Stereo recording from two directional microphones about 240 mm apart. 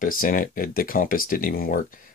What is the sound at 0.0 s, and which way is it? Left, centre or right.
Speech, left.